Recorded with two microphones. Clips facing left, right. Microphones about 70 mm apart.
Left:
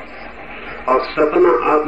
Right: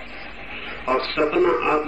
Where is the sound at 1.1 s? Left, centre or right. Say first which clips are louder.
Left 6 dB; left.